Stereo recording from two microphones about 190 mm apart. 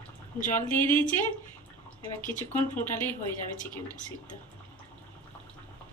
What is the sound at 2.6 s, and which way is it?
Speech, 10° left (ahead or behind).